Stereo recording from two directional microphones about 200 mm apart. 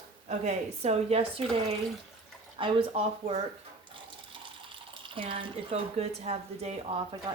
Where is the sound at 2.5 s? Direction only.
25° right (ahead or behind).